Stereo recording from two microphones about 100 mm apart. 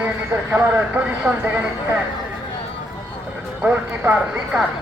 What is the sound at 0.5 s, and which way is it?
Speech, 15° right (ahead or behind).